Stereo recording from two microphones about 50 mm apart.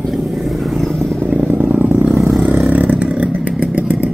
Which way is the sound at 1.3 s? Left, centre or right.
Right.